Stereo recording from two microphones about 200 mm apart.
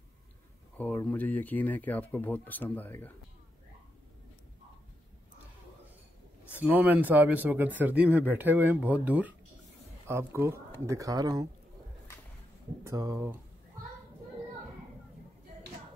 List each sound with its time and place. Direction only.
0.7 s speech: 5° left (ahead or behind)
6.5 s speech: 10° right (ahead or behind)
12.8 s speech: 15° right (ahead or behind)